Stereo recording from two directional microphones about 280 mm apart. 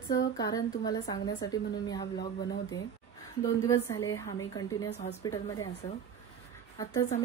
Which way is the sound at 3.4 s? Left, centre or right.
Centre.